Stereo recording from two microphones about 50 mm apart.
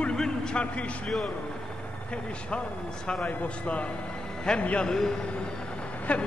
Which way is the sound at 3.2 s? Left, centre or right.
Left.